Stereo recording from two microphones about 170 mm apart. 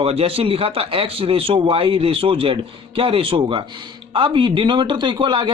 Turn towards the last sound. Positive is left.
turn(degrees=-30)  # may be behind; listen again after turning